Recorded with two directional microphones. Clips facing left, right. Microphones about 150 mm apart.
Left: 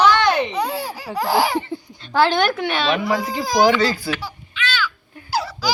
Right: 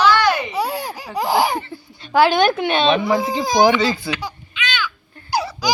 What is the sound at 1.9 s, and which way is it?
Speech, 15° right (ahead or behind).